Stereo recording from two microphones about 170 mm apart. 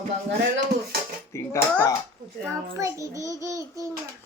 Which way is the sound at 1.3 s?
15° left (ahead or behind).